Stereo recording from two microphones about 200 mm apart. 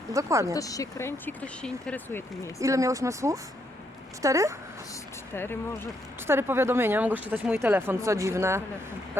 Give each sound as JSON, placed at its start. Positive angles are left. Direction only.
{"t": 0.1, "sound": "speech", "side_deg": -15}
{"t": 0.4, "sound": "speech", "side_deg": 15}
{"t": 2.6, "sound": "speech", "side_deg": -15}
{"t": 5.3, "sound": "speech", "side_deg": 10}
{"t": 6.2, "sound": "speech", "side_deg": -10}